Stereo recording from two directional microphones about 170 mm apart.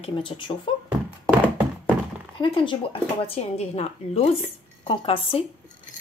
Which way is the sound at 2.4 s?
30° left (ahead or behind).